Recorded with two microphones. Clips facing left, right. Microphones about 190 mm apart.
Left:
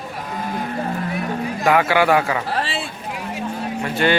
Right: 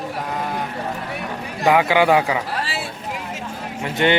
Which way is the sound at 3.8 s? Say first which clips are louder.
Right 1 dB; 20° right (ahead or behind).